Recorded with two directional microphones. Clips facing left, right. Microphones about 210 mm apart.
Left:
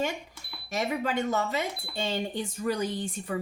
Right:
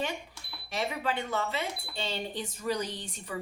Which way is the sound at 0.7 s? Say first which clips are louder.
Left 3 dB; 45° left (ahead or behind).